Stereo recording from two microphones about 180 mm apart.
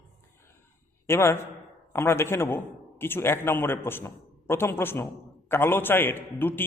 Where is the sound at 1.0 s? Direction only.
15° left (ahead or behind).